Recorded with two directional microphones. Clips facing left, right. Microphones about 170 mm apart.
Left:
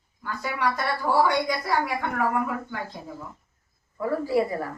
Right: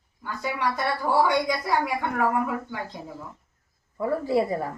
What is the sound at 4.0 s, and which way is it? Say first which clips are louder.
Speech: even; 25° right (ahead or behind).